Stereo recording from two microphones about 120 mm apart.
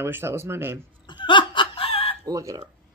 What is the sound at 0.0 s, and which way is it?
Speech, 20° right (ahead or behind).